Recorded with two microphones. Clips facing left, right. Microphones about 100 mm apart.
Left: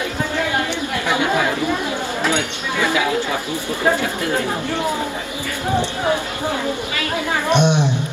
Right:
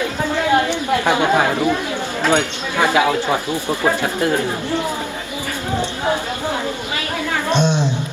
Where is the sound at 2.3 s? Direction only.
50° right (ahead or behind).